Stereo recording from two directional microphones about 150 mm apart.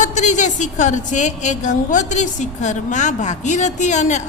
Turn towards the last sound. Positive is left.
turn(degrees=50)  # may be behind; listen again after turning